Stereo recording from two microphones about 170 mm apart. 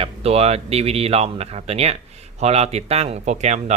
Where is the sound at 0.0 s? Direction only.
35° right (ahead or behind).